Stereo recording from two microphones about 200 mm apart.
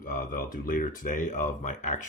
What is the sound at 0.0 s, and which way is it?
Speech, 40° left (ahead or behind).